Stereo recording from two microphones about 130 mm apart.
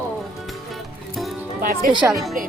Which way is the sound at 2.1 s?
Centre (ahead or behind).